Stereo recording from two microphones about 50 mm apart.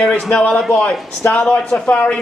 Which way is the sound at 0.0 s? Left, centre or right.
Centre.